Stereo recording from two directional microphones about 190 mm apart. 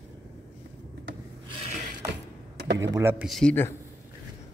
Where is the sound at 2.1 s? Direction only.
60° right (ahead or behind).